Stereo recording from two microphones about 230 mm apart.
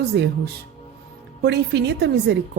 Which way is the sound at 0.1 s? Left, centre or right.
Right.